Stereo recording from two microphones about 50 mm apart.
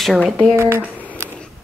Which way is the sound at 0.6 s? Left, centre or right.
Right.